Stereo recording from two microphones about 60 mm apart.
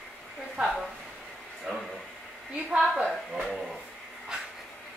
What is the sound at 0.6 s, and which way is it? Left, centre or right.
Speech, centre.